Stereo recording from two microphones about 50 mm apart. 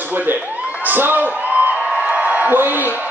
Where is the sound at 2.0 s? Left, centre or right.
Right.